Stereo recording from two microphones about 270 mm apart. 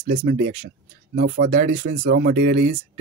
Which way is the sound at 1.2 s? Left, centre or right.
Right.